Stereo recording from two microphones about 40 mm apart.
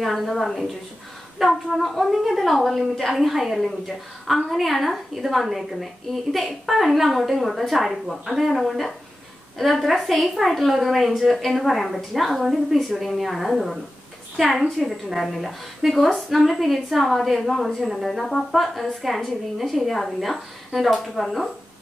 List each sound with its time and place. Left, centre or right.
0.0 s a woman's voice: centre